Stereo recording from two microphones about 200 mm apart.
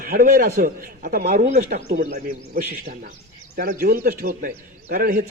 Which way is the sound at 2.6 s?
45° right (ahead or behind).